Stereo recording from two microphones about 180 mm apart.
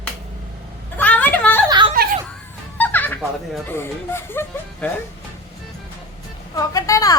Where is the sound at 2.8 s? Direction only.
10° left (ahead or behind).